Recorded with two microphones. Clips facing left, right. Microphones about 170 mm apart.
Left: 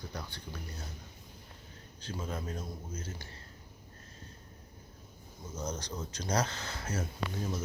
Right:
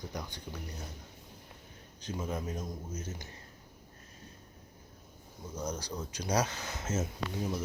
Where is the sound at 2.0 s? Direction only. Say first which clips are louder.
Right 2 dB; 15° right (ahead or behind).